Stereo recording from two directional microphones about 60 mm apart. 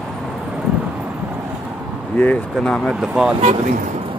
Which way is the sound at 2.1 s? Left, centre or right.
Left.